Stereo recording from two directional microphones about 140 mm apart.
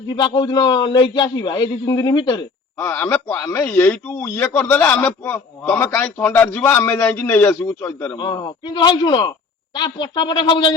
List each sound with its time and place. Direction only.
0.2 s a man's voice: 30° left (ahead or behind)
2.7 s speech: 15° left (ahead or behind)
8.1 s a man's voice: 35° left (ahead or behind)